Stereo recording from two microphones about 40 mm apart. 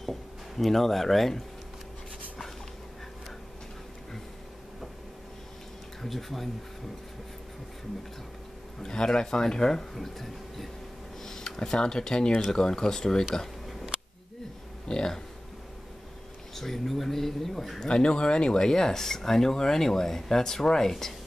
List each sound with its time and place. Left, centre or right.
0.0 s drawer open or close: centre
6.0 s speech: centre
8.8 s speech: centre
13.3 s a sound: centre
14.9 s speech: left
16.5 s speech: centre
17.8 s speech: left